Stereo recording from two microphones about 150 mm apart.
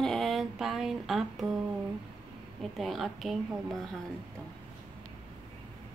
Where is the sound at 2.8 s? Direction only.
Centre (ahead or behind).